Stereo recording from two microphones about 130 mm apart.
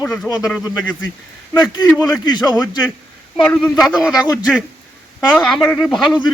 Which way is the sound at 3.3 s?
5° left (ahead or behind).